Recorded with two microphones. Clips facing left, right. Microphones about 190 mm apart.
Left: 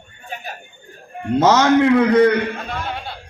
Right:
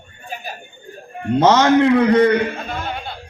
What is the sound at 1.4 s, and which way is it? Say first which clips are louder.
Speech: right 1 dB; 5° left (ahead or behind).